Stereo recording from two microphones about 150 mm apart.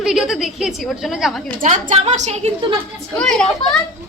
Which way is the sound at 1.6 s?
60° right (ahead or behind).